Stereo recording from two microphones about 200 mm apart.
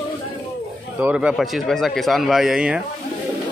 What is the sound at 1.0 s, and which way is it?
Speech, 5° right (ahead or behind).